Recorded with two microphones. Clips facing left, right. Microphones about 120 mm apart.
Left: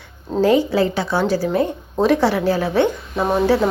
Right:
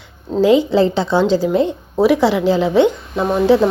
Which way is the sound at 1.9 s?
10° right (ahead or behind).